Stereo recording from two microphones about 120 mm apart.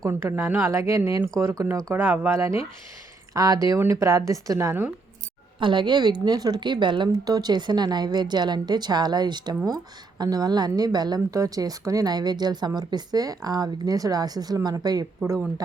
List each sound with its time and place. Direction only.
0.0 s a woman's voice: 20° right (ahead or behind)
1.9 s a woman's voice: 15° right (ahead or behind)
5.5 s speech: 40° right (ahead or behind)